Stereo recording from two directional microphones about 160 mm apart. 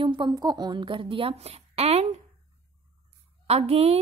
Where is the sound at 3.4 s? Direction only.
40° right (ahead or behind).